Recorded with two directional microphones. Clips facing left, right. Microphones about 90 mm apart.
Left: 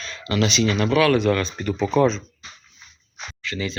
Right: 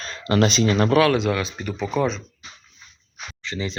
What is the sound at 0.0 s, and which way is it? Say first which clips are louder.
Speech: right 3 dB; 40° right (ahead or behind).